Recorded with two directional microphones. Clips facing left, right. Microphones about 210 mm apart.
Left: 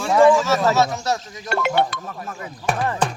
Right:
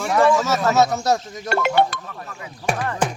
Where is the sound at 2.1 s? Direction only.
40° left (ahead or behind).